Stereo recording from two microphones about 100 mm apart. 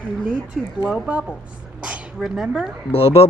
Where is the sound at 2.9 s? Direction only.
75° left (ahead or behind).